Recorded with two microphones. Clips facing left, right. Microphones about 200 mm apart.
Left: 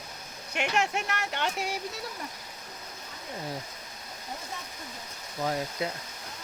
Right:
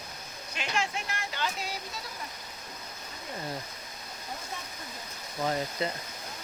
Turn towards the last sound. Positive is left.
turn(degrees=5)  # may be behind; listen again after turning